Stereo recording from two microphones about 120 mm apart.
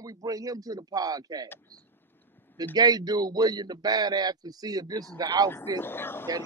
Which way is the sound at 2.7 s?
35° right (ahead or behind).